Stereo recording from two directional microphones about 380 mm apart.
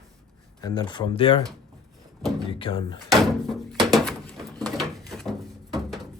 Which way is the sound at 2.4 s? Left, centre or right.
Centre.